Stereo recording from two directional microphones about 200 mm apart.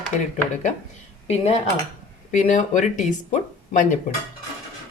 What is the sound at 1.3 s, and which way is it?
Speech, 35° left (ahead or behind).